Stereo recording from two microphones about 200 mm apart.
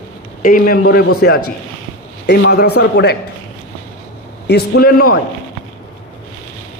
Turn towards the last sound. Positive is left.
turn(degrees=50)  # may be behind; listen again after turning